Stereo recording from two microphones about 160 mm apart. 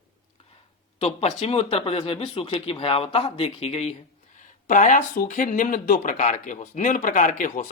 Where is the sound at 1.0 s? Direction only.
40° left (ahead or behind).